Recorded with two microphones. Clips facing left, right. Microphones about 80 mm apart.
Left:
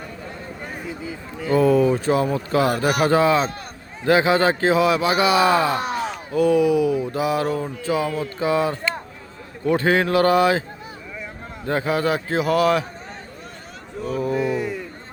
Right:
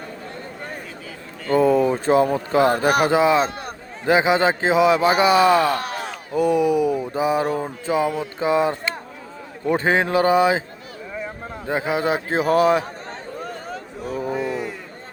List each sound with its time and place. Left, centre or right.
0.9 s a sound: centre
1.5 s speech: right
3.1 s speech: centre
5.4 s speech: centre
6.3 s speech: right
11.6 s speech: centre
14.3 s a sound: centre